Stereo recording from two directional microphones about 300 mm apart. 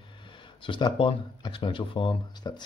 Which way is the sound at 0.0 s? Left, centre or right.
Centre.